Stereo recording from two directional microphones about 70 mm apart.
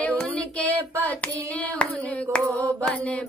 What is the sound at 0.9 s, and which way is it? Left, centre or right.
Child singing, right.